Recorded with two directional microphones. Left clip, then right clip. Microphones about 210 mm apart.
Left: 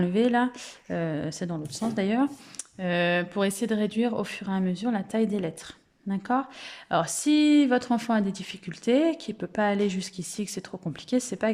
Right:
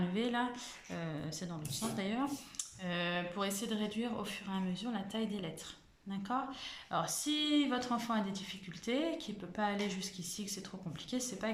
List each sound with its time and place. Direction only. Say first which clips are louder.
0.0 s speech: left 12 dB; 50° left (ahead or behind)